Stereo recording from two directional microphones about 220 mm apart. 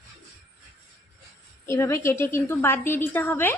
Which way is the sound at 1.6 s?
10° left (ahead or behind).